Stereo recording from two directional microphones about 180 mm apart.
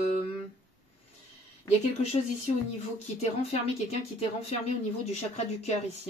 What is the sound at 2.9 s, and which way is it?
Speech, 35° left (ahead or behind).